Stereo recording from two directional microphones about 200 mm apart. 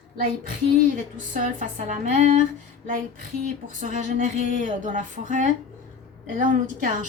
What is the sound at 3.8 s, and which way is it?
A woman's voice, 40° right (ahead or behind).